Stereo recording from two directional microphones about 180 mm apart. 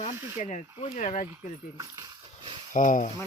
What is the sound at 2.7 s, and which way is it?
Speech, 45° left (ahead or behind).